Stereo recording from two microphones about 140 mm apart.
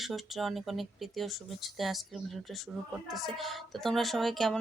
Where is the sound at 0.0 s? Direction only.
Centre (ahead or behind).